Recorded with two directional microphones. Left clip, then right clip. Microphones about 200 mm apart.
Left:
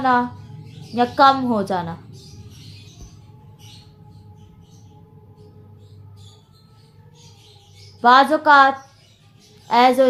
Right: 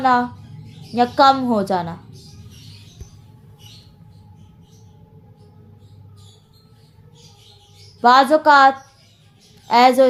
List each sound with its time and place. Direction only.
0.0 s a woman's voice: 30° right (ahead or behind)
8.0 s a woman's voice: 30° right (ahead or behind)